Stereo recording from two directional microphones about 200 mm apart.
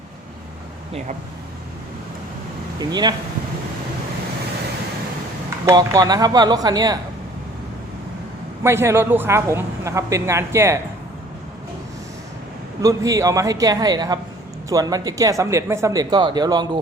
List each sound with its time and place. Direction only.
2.7 s speech: 20° right (ahead or behind)
5.6 s speech: 20° right (ahead or behind)
8.6 s a man's voice: 10° right (ahead or behind)
12.8 s a man's voice: 15° right (ahead or behind)